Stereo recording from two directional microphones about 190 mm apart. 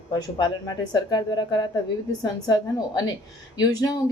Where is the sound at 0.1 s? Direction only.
20° left (ahead or behind).